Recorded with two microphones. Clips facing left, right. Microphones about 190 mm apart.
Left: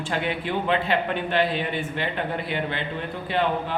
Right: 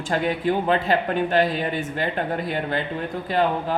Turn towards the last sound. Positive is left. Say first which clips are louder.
# right 3 dB
turn(degrees=-40)  # may be behind; listen again after turning